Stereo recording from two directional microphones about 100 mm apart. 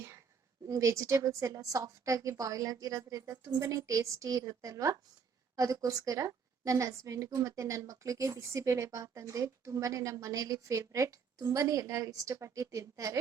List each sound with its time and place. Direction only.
0.7 s a woman's voice: 30° right (ahead or behind)